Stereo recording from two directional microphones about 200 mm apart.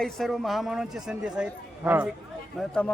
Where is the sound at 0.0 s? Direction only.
Centre (ahead or behind).